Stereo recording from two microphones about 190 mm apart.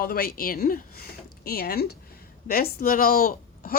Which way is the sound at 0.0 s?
55° left (ahead or behind).